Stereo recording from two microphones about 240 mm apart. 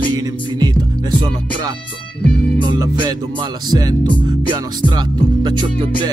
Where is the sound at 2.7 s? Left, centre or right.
Centre.